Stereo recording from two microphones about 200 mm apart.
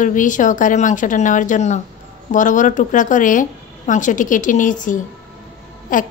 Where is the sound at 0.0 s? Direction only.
40° left (ahead or behind).